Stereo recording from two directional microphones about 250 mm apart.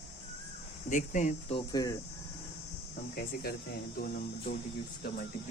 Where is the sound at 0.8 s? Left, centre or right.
Left; by 2.0 s centre.